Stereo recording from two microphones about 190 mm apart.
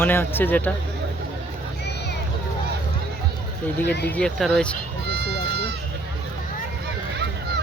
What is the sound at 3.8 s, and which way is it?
Speech, 60° left (ahead or behind).